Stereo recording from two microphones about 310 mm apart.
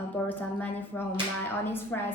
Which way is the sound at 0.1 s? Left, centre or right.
Centre.